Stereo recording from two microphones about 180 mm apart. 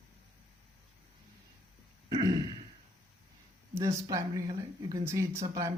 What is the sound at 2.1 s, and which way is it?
Speech, 20° right (ahead or behind).